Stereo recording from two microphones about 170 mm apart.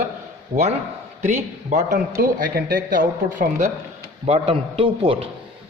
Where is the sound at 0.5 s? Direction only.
25° right (ahead or behind).